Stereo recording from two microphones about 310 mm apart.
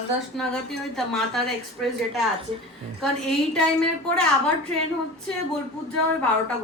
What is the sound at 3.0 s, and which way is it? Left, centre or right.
Speech, centre.